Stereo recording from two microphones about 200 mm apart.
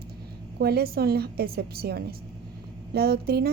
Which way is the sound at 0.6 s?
50° right (ahead or behind).